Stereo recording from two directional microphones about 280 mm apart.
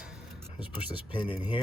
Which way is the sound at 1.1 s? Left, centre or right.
Centre.